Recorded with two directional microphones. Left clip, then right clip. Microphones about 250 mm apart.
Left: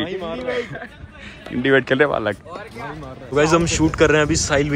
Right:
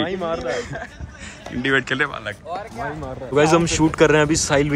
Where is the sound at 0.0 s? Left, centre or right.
Right.